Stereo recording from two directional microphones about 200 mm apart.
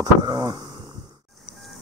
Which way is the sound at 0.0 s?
20° right (ahead or behind).